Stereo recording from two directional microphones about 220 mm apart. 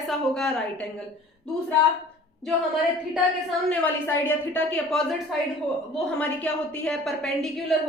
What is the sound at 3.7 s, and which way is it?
A woman's voice, 10° left (ahead or behind).